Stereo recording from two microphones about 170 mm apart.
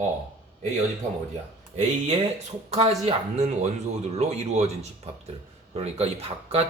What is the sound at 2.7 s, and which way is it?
Speech, 40° right (ahead or behind).